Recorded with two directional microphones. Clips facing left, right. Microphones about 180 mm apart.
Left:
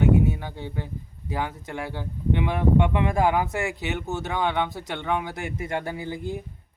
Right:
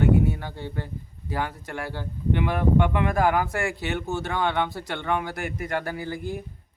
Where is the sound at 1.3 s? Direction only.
20° left (ahead or behind).